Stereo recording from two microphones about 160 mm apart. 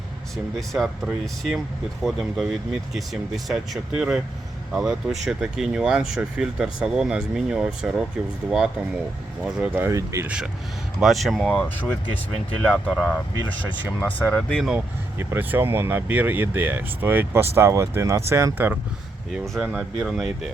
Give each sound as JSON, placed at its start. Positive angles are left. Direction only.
{"t": 0.7, "sound": "speech", "side_deg": 0}
{"t": 10.2, "sound": "speech", "side_deg": -5}
{"t": 15.2, "sound": "speech", "side_deg": -15}
{"t": 19.3, "sound": "speech", "side_deg": 0}